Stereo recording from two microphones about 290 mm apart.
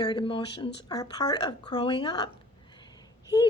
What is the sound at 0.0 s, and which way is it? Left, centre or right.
Speech, centre.